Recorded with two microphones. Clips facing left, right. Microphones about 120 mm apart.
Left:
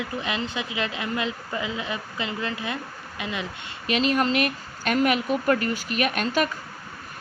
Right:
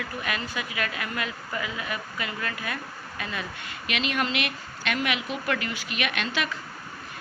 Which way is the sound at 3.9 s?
35° left (ahead or behind).